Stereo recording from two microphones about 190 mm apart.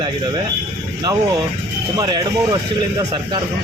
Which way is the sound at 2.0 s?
20° right (ahead or behind).